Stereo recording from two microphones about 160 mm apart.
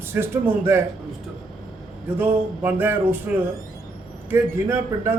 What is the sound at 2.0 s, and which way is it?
A man's voice, 10° right (ahead or behind).